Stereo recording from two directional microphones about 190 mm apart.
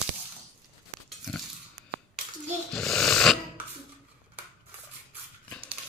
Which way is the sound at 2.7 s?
Centre (ahead or behind).